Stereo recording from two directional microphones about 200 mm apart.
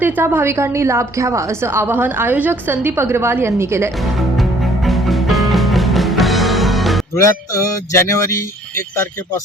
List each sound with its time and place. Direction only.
0.0 s a woman's voice: 10° right (ahead or behind)
4.0 s music: centre (ahead or behind)
7.2 s music: 15° left (ahead or behind)